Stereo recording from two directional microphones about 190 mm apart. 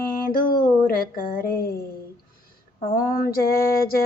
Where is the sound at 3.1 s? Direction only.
50° left (ahead or behind).